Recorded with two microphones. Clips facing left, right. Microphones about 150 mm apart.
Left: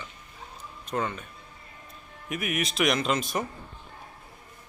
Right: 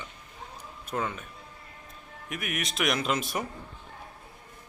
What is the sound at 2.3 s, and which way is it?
Speech, centre (ahead or behind).